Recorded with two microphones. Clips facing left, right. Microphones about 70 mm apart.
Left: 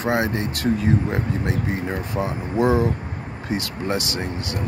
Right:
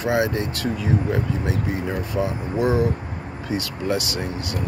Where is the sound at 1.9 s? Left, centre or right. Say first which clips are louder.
Right 1 dB; left.